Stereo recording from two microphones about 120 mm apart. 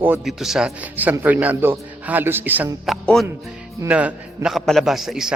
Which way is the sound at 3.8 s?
10° right (ahead or behind).